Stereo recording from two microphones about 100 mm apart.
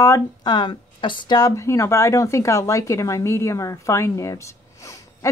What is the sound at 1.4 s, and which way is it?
Speech, 30° left (ahead or behind).